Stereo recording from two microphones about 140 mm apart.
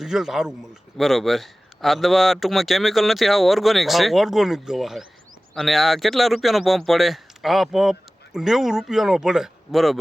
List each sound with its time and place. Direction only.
0.0 s a man's voice: 5° right (ahead or behind)